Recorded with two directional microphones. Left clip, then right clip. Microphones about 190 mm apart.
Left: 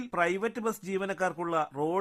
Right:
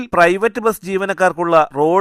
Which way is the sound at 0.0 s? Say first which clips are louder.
Right 16 dB; 40° right (ahead or behind).